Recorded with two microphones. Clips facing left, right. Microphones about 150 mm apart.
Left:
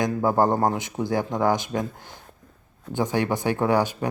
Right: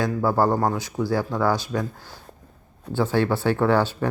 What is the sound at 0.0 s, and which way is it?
Speech, 20° left (ahead or behind).